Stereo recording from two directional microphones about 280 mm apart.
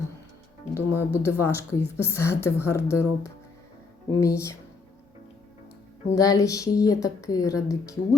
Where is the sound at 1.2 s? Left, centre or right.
Centre.